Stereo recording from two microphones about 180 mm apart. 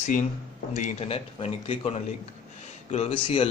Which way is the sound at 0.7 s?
40° left (ahead or behind).